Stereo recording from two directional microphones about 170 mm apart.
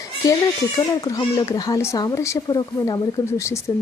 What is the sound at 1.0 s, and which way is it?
Speech, 20° left (ahead or behind).